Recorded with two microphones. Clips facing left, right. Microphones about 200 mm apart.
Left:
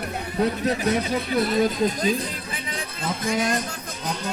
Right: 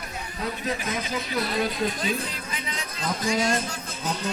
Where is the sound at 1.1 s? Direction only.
55° left (ahead or behind); by 2.6 s 40° left (ahead or behind).